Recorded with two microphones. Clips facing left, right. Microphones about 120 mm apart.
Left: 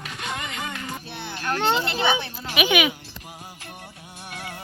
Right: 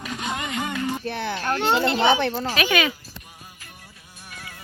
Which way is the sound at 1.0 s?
55° right (ahead or behind).